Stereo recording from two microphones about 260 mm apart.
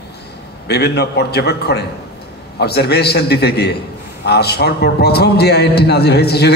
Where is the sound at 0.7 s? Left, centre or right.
Left.